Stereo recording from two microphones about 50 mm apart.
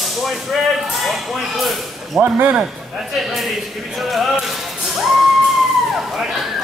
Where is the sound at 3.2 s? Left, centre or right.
Centre.